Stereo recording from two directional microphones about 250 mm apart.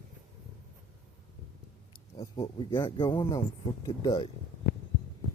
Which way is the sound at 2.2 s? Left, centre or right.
Left.